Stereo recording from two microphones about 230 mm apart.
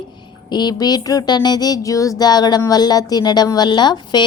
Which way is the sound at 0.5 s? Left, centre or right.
Centre.